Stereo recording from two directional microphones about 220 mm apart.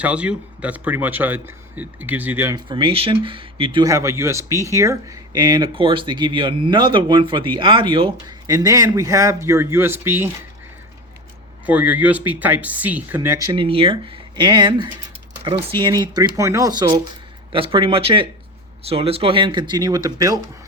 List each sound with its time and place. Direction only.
0.0 s speech: 5° right (ahead or behind)
2.6 s speech: 20° right (ahead or behind)
11.6 s speech: 5° right (ahead or behind)